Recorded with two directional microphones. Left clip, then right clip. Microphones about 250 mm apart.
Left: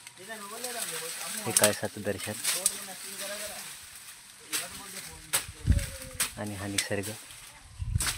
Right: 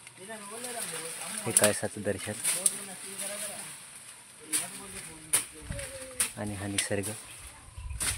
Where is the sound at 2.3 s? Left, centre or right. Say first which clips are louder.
Left 2 dB; left.